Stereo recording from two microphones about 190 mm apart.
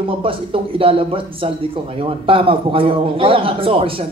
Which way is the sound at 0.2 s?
30° right (ahead or behind).